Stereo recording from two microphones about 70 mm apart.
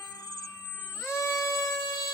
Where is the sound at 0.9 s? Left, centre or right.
Left.